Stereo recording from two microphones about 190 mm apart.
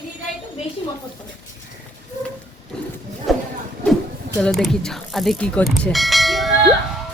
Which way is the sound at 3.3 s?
Centre (ahead or behind).